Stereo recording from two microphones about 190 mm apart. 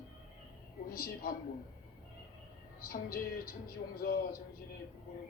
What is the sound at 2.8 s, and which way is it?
Speech, 50° left (ahead or behind).